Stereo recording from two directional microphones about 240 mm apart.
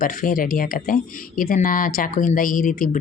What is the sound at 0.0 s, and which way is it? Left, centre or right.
Speech, left.